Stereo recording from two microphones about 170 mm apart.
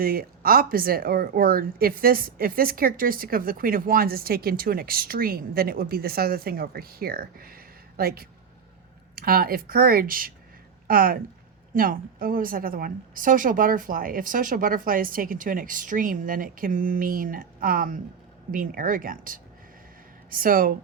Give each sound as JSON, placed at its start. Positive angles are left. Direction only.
{"t": 0.0, "sound": "speech", "side_deg": -60}